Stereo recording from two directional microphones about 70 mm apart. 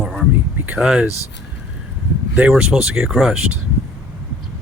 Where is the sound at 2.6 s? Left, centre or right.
Centre.